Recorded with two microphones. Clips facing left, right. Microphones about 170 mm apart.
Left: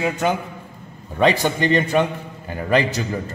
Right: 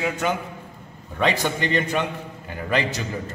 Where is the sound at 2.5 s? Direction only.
40° left (ahead or behind).